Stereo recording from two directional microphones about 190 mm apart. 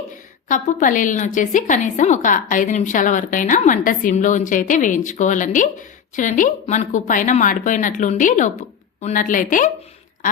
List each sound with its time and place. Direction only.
0.4 s a woman's voice: 40° left (ahead or behind)